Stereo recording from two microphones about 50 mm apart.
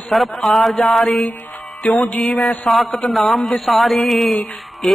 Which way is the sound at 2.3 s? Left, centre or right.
Left.